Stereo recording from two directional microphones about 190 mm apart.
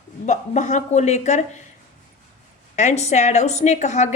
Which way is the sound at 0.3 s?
40° left (ahead or behind).